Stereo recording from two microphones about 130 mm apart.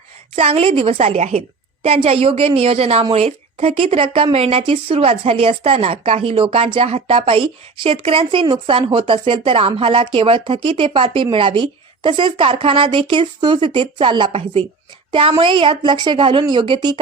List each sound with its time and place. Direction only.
0.3 s a woman's voice: 50° right (ahead or behind)